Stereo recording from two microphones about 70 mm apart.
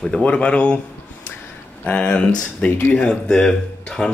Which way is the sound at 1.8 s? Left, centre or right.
Centre.